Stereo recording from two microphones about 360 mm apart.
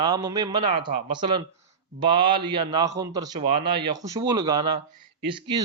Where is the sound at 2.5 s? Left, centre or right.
Centre.